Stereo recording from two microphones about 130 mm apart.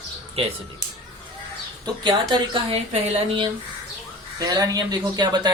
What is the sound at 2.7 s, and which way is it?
Speech, 55° right (ahead or behind).